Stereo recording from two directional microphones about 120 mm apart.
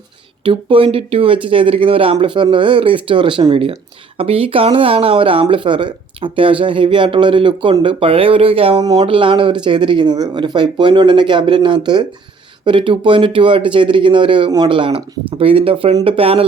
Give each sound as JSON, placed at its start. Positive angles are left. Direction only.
{"t": 0.4, "sound": "speech", "side_deg": -45}
{"t": 8.8, "sound": "speech", "side_deg": -35}
{"t": 9.0, "sound": "speech", "side_deg": -45}